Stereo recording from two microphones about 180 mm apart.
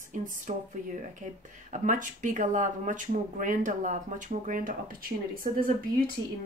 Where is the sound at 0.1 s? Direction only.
45° right (ahead or behind).